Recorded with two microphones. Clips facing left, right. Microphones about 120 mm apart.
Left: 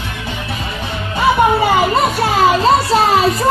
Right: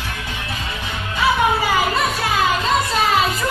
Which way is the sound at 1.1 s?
30° left (ahead or behind).